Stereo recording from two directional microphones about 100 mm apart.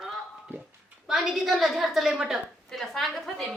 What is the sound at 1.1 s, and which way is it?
A woman's voice, 5° right (ahead or behind).